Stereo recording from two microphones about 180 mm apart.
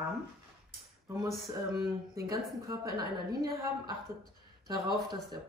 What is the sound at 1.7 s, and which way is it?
A woman's voice, 20° right (ahead or behind).